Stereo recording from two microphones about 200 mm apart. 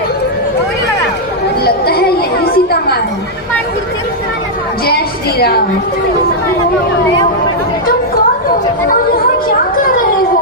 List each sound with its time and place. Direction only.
1.6 s chatter: 50° left (ahead or behind)
5.4 s a woman's voice: 50° left (ahead or behind)